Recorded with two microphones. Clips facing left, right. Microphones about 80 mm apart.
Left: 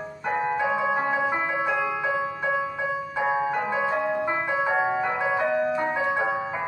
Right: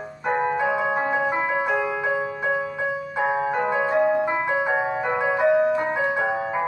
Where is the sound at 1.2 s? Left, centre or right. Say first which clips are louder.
Right 2 dB; centre.